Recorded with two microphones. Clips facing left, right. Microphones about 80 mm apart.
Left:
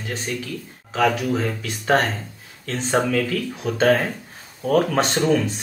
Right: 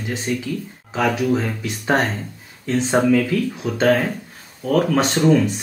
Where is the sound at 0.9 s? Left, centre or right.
Centre.